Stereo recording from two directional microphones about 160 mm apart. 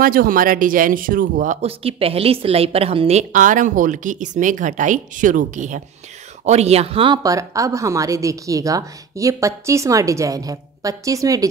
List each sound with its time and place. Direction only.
0.0 s speech: 65° right (ahead or behind); by 7.2 s 35° right (ahead or behind)
7.2 s a woman's voice: 20° right (ahead or behind)